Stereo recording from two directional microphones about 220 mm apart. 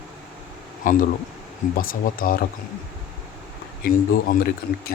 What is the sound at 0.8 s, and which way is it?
Speech, 35° left (ahead or behind).